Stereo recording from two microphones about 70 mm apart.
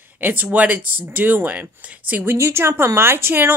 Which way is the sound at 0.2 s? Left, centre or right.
Right.